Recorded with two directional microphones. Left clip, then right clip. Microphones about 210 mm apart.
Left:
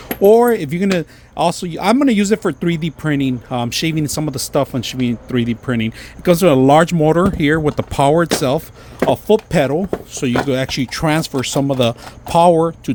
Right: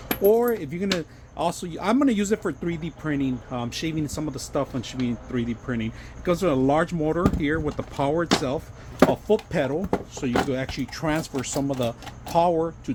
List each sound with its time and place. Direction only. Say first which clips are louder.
0.1 s speech: left 10 dB; 45° left (ahead or behind)